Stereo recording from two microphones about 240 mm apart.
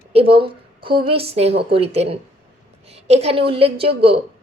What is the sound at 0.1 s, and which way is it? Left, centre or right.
A woman's voice, right.